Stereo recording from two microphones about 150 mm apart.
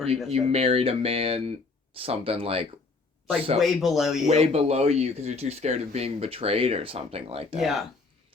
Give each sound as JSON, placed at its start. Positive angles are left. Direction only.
{"t": 0.3, "sound": "speech", "side_deg": -40}
{"t": 3.6, "sound": "speech", "side_deg": 0}
{"t": 4.3, "sound": "speech", "side_deg": -45}
{"t": 7.6, "sound": "speech", "side_deg": 0}